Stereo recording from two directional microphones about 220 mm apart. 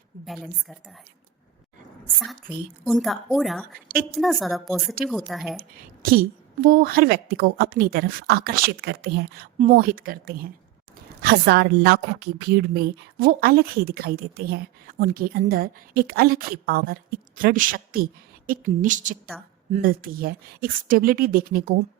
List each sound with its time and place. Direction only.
0.3 s a woman's voice: centre (ahead or behind)
2.8 s a woman's voice: centre (ahead or behind)
5.5 s a woman's voice: 40° right (ahead or behind)
19.3 s a woman's voice: 5° left (ahead or behind)
19.7 s speech: 40° right (ahead or behind)